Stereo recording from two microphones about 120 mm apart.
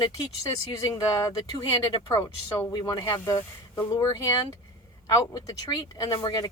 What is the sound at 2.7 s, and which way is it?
Speech, 35° left (ahead or behind).